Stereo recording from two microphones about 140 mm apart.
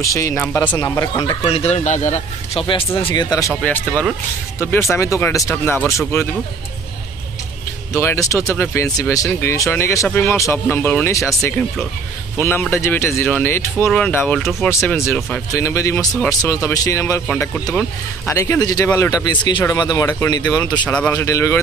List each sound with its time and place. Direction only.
0.0 s speech: 20° left (ahead or behind)
1.5 s a man's voice: 50° left (ahead or behind)
3.0 s speech: 35° left (ahead or behind)
3.6 s speech: 10° left (ahead or behind)
7.9 s speech: 20° left (ahead or behind)
12.4 s speech: 15° left (ahead or behind)
14.4 s speech: centre (ahead or behind)
15.5 s speech: 20° left (ahead or behind)
18.2 s speech: 20° left (ahead or behind)
20.8 s speech: 10° left (ahead or behind)
21.1 s speech: 20° left (ahead or behind)